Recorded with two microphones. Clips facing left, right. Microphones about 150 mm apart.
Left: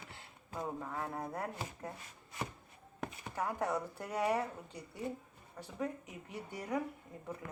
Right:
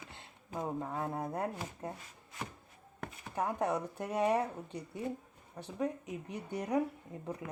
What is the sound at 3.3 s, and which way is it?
Speech, 20° right (ahead or behind).